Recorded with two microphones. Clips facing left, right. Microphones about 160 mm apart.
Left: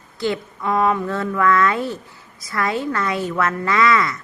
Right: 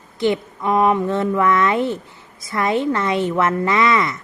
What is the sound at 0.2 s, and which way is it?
Speech, 20° right (ahead or behind).